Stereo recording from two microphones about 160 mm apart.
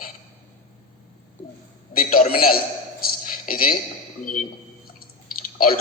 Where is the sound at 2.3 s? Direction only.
65° left (ahead or behind).